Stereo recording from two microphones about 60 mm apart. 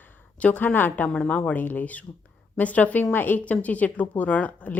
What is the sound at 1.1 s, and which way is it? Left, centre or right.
A woman's voice, left.